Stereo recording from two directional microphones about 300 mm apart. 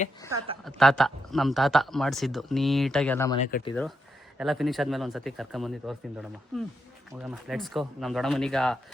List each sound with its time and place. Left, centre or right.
0.6 s speech: centre
3.4 s speech: left
4.4 s speech: centre